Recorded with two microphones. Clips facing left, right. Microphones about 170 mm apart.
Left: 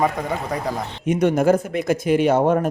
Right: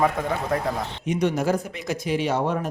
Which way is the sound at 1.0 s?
50° left (ahead or behind).